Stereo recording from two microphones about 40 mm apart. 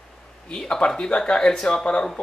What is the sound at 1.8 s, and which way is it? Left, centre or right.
Speech, left.